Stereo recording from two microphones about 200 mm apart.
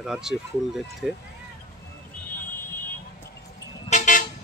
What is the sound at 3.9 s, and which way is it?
Toot, 40° left (ahead or behind).